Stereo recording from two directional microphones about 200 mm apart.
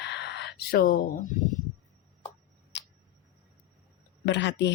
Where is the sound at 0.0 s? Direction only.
60° left (ahead or behind).